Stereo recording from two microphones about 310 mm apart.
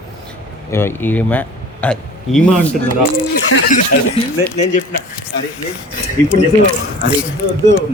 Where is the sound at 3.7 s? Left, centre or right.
Left.